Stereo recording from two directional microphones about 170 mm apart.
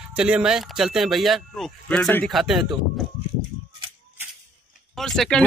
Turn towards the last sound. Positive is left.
turn(degrees=5)  # may be behind; listen again after turning